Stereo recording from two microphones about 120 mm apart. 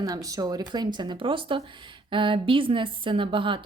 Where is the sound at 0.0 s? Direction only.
30° right (ahead or behind).